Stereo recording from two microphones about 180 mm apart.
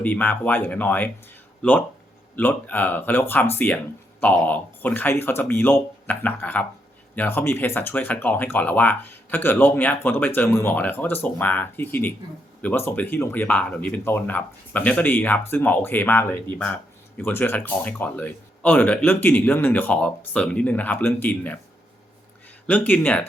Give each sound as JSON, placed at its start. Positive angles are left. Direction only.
{"t": 0.0, "sound": "speech", "side_deg": 10}
{"t": 22.6, "sound": "speech", "side_deg": 10}